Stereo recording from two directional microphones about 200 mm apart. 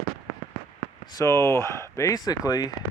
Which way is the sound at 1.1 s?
15° left (ahead or behind).